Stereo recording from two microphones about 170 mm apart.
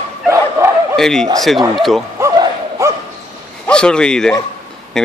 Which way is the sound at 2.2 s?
15° right (ahead or behind).